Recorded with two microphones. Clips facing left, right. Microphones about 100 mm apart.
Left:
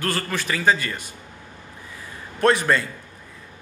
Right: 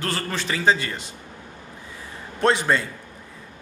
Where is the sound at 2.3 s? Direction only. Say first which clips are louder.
Left 1 dB; 20° right (ahead or behind).